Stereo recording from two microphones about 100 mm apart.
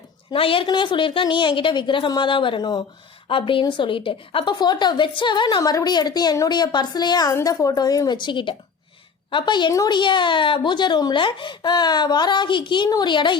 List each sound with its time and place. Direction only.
0.3 s speech: 65° left (ahead or behind); by 2.8 s 50° left (ahead or behind)
3.2 s speech: 60° left (ahead or behind)